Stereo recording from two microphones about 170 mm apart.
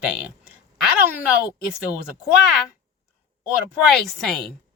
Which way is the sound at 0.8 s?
10° right (ahead or behind).